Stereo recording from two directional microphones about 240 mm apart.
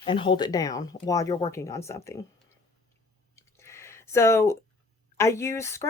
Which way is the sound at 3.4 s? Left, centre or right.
Centre.